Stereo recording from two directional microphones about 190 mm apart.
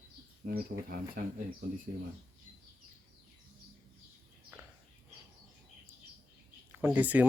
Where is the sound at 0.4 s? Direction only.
50° right (ahead or behind).